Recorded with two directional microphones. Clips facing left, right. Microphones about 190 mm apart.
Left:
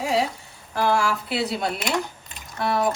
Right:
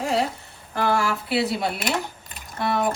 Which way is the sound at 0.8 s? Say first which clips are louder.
Left 1 dB; centre (ahead or behind).